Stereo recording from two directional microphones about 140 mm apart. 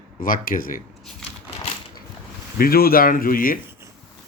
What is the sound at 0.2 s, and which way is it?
Speech, 85° left.